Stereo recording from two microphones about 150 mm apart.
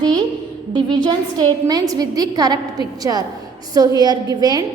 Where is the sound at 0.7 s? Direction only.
30° right (ahead or behind).